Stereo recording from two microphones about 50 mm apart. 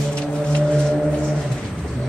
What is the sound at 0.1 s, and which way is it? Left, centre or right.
Music, centre.